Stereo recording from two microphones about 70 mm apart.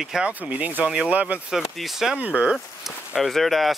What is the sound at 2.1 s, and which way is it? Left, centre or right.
Speech, centre.